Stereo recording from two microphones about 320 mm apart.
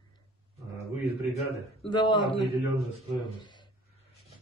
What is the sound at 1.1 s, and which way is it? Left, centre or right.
Speech, left.